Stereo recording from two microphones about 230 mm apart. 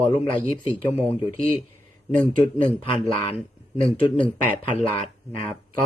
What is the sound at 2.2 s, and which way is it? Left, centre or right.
Speech, centre.